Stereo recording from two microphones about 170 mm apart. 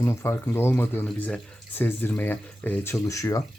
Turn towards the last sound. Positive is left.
turn(degrees=20)  # may be behind; listen again after turning